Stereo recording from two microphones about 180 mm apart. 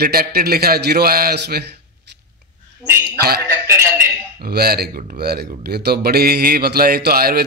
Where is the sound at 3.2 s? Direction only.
60° right (ahead or behind).